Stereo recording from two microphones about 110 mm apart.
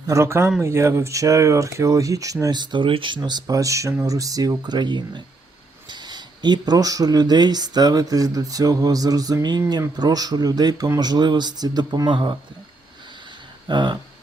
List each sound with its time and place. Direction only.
0.1 s speech: 25° right (ahead or behind); by 12.4 s 45° right (ahead or behind)
13.7 s speech: 45° right (ahead or behind)